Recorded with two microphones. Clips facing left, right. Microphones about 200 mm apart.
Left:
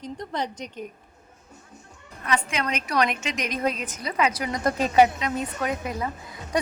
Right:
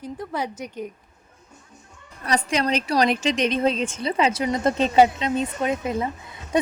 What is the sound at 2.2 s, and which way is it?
A woman's voice, 35° right (ahead or behind).